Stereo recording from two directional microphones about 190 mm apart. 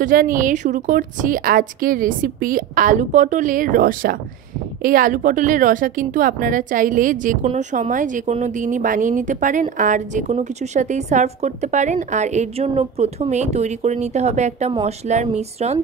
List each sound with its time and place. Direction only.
0.0 s a woman's voice: 45° right (ahead or behind)